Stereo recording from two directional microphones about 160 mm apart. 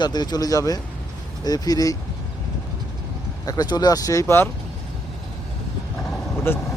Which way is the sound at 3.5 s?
25° left (ahead or behind).